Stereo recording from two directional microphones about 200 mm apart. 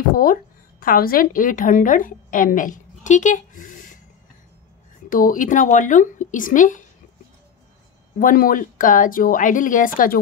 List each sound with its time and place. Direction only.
0.1 s a woman's voice: 45° left (ahead or behind)
5.1 s speech: 40° left (ahead or behind)
8.2 s a woman's voice: 45° left (ahead or behind)